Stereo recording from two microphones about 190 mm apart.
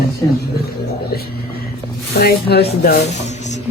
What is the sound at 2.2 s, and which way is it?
Speech, 55° left (ahead or behind).